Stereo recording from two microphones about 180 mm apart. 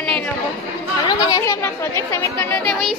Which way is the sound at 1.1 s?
25° left (ahead or behind).